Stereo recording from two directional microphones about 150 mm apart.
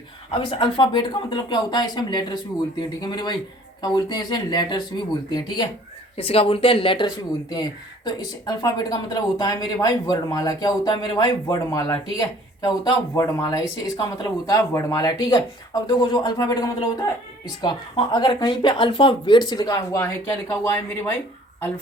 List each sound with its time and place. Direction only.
0.6 s speech: 30° left (ahead or behind); by 21.1 s 15° left (ahead or behind)